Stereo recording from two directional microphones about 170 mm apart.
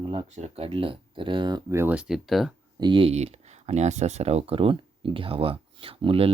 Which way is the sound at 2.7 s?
30° right (ahead or behind).